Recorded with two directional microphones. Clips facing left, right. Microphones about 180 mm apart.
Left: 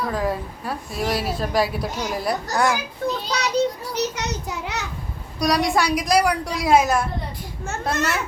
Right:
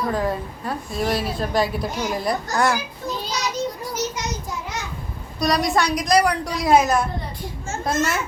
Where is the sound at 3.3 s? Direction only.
65° left (ahead or behind).